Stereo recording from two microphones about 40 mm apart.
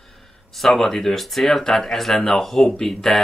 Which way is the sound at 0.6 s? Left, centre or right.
Centre.